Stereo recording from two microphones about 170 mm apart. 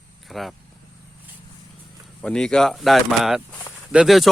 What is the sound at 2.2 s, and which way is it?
Speech, 5° left (ahead or behind).